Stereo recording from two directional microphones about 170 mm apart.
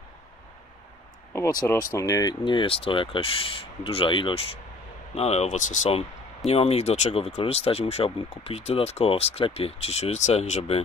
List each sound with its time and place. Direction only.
1.3 s speech: 15° left (ahead or behind); by 10.8 s 40° left (ahead or behind)